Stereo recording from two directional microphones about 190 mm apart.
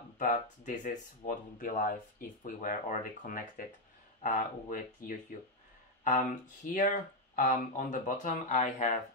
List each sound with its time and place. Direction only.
0.2 s speech: 40° left (ahead or behind)